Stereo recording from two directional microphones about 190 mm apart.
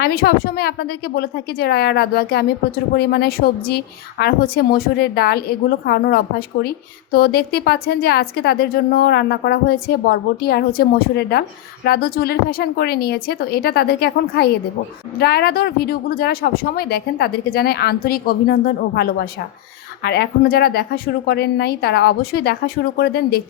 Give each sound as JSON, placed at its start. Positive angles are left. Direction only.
{"t": 0.0, "sound": "a woman's voice", "side_deg": 55}